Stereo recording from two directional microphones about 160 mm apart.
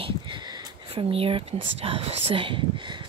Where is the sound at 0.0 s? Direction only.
30° right (ahead or behind).